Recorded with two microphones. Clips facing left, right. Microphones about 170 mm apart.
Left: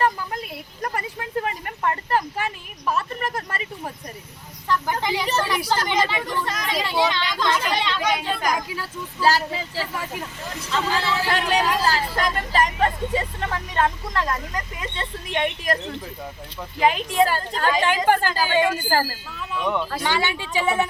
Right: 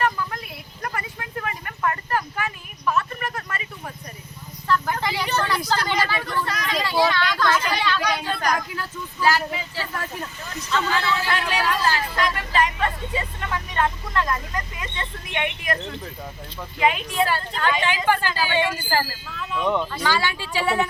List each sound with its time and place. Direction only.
0.0 s a sound: 25° left (ahead or behind)
4.7 s vehicle: 15° left (ahead or behind)
5.4 s speech: 10° left (ahead or behind)
8.5 s speech: 10° left (ahead or behind)
9.2 s speech: 35° left (ahead or behind)
9.9 s speech: 10° left (ahead or behind)
10.7 s speech: 30° left (ahead or behind)
16.8 s a woman's voice: 35° left (ahead or behind)
19.4 s speech: centre (ahead or behind)
20.1 s speech: 20° left (ahead or behind)